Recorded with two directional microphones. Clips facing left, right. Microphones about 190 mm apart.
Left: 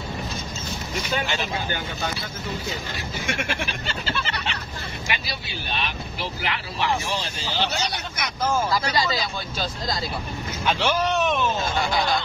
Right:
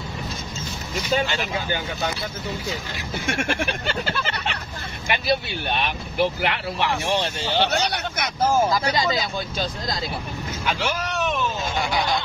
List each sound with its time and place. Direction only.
3.3 s speech: 55° right (ahead or behind)
8.6 s speech: 20° right (ahead or behind)
10.6 s speech: 25° left (ahead or behind)